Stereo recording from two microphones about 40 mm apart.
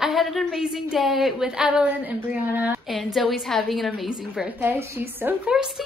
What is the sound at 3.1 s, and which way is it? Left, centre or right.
A woman's voice, centre.